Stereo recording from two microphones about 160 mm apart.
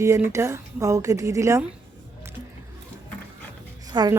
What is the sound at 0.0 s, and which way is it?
A woman's voice, 20° right (ahead or behind).